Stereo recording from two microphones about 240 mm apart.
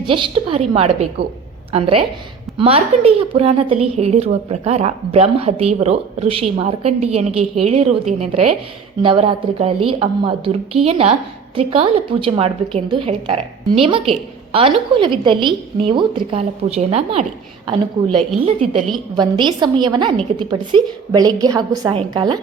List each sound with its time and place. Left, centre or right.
0.0 s a woman's voice: right